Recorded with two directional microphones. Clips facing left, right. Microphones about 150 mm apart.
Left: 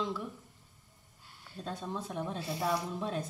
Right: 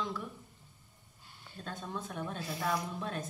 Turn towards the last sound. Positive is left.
turn(degrees=30)  # may be behind; listen again after turning